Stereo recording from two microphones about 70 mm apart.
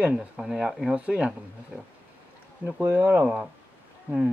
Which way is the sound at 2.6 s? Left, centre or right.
Right.